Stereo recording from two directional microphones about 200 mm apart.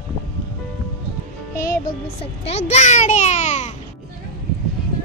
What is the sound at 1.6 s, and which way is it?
Music, 15° left (ahead or behind).